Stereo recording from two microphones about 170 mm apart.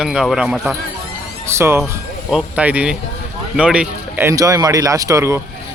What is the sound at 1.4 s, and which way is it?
Speech, 15° right (ahead or behind).